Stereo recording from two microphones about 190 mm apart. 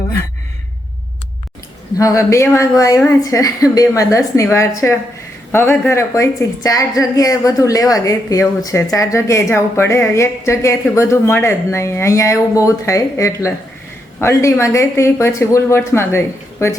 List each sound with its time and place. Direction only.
2.0 s a woman's voice: 15° left (ahead or behind)